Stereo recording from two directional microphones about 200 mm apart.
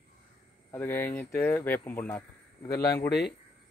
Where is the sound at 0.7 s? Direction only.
10° left (ahead or behind).